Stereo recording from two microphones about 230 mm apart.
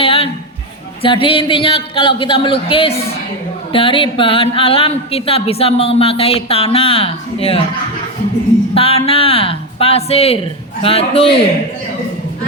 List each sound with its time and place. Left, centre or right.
0.0 s a man's voice: left
8.7 s speech: left